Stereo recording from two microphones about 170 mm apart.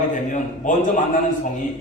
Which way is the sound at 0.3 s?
50° left (ahead or behind).